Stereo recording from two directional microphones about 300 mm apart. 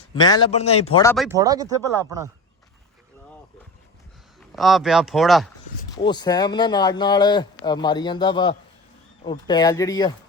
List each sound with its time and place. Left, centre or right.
0.1 s speech: centre
1.0 s speech: centre
1.4 s speech: centre
4.4 s speech: centre
6.0 s speech: centre